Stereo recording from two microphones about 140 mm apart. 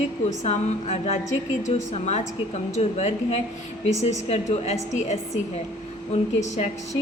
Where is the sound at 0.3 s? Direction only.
50° left (ahead or behind).